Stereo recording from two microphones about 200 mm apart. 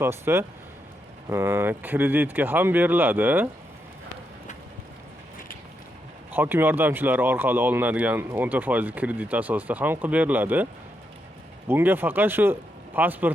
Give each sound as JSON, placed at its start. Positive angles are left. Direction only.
{"t": 0.0, "sound": "speech", "side_deg": -10}
{"t": 6.3, "sound": "speech", "side_deg": -10}
{"t": 11.7, "sound": "speech", "side_deg": -10}